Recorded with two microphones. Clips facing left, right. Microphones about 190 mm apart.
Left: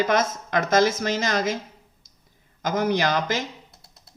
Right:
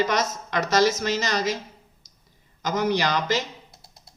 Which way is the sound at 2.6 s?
50° left (ahead or behind).